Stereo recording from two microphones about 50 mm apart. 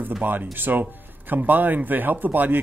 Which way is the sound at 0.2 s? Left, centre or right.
Right.